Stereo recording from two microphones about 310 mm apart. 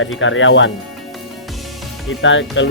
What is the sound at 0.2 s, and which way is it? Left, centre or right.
Speech, left.